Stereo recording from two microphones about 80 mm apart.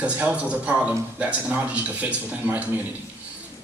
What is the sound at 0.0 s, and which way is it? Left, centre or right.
Speech, centre.